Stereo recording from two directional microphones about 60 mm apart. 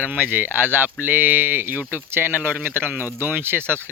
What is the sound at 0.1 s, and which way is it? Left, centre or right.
Speech, right.